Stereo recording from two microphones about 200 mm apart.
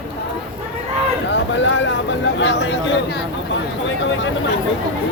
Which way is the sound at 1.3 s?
70° left (ahead or behind).